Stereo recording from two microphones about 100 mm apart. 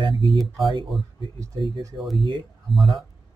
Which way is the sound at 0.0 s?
55° right (ahead or behind).